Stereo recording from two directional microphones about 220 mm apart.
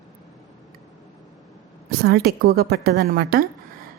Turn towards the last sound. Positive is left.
turn(degrees=-45)  # may be behind; listen again after turning